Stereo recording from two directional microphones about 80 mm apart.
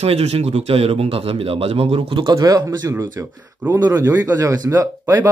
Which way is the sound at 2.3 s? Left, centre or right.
Right.